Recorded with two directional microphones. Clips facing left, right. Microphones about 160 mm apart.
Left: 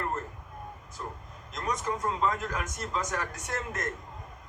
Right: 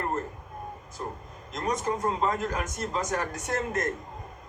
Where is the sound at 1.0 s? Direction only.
35° right (ahead or behind).